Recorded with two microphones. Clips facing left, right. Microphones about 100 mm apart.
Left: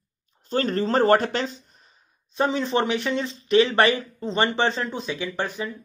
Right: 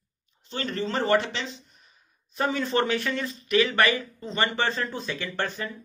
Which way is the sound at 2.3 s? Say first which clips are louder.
Left 3 dB; 20° left (ahead or behind).